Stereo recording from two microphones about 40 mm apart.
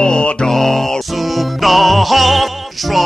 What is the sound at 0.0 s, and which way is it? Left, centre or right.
Mantra, centre.